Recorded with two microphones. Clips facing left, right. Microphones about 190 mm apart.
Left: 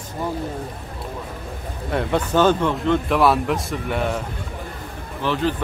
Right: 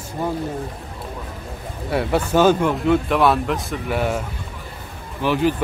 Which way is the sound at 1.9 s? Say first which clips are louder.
Right 1 dB; 5° right (ahead or behind).